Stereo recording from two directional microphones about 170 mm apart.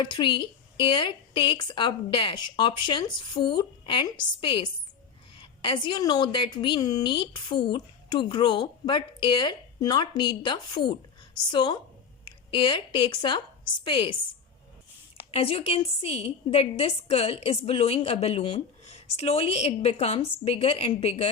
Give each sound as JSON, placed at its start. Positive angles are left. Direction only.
{"t": 0.0, "sound": "a woman's voice", "side_deg": 30}
{"t": 15.3, "sound": "a woman's voice", "side_deg": 35}